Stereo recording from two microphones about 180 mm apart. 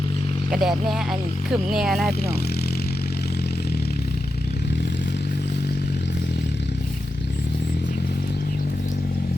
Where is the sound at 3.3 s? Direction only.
60° left (ahead or behind).